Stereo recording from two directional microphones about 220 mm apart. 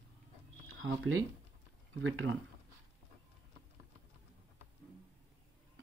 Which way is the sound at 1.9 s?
60° right (ahead or behind).